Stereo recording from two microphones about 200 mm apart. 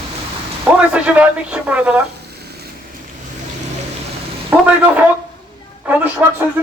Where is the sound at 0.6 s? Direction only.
5° right (ahead or behind).